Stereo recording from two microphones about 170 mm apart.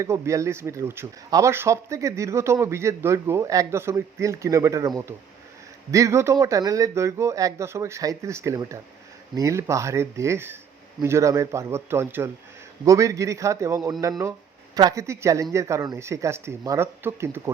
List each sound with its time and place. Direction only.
0.0 s speech: 15° right (ahead or behind)